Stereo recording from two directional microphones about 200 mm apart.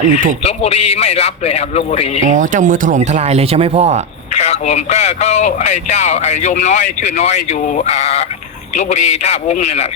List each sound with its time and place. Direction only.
0.4 s a man's voice: 30° left (ahead or behind)
2.3 s speech: 40° right (ahead or behind)
4.4 s a man's voice: 30° left (ahead or behind)